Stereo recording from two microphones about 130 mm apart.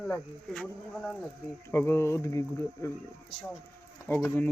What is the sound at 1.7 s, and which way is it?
Speech, 20° left (ahead or behind).